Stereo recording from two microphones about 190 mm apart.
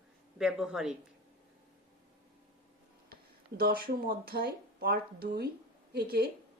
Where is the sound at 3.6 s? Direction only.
50° right (ahead or behind).